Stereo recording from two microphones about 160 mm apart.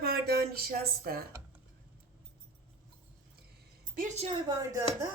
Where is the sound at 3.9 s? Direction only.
45° right (ahead or behind).